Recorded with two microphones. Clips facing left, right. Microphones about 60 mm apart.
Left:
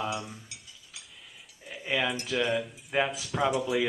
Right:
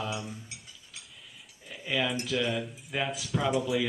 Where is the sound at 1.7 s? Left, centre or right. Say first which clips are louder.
Left 1 dB; left.